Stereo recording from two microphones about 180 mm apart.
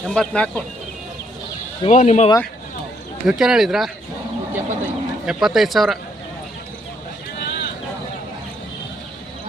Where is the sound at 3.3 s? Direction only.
5° right (ahead or behind).